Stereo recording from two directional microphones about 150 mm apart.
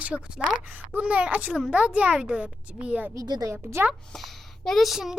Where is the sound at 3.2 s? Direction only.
25° right (ahead or behind).